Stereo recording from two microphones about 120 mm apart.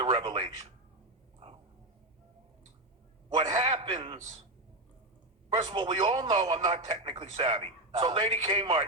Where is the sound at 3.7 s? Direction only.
45° right (ahead or behind).